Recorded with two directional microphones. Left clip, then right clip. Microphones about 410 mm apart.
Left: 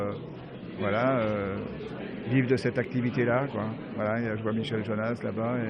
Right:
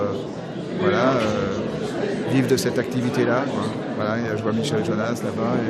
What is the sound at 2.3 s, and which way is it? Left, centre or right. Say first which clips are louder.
Speech: right 4 dB; left.